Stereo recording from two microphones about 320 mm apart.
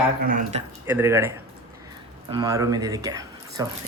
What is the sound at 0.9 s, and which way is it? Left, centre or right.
Speech, centre.